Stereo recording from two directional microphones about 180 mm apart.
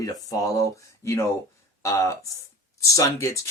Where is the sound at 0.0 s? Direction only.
20° left (ahead or behind).